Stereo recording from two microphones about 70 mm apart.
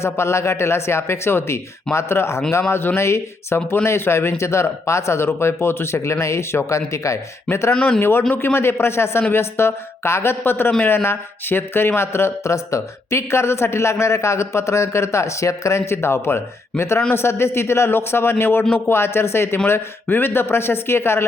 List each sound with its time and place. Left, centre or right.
0.0 s speech: left
7.7 s speech: centre
7.9 s speech: left